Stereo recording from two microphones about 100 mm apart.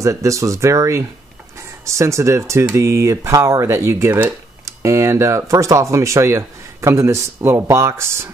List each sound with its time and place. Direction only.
0.0 s speech: 30° right (ahead or behind)